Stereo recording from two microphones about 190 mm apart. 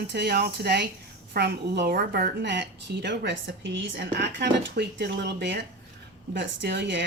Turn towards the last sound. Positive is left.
turn(degrees=-65)  # may be behind; listen again after turning